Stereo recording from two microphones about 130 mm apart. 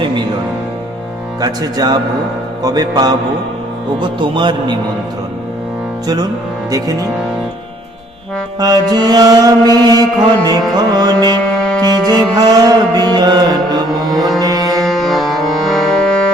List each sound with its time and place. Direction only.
1.4 s speech: 30° right (ahead or behind)
2.6 s music: 30° right (ahead or behind)
6.7 s speech: 25° right (ahead or behind)
8.5 s music: 30° right (ahead or behind)
11.4 s music: 5° left (ahead or behind)
12.1 s music: 30° right (ahead or behind)
14.8 s music: centre (ahead or behind)